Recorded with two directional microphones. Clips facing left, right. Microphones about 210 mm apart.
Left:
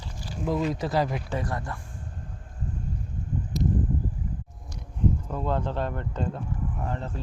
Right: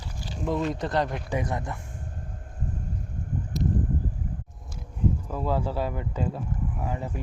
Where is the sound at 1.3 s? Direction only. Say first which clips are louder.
Right 2 dB; 20° right (ahead or behind).